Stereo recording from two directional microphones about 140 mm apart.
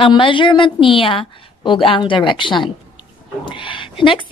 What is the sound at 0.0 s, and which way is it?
A woman's voice, 35° left (ahead or behind).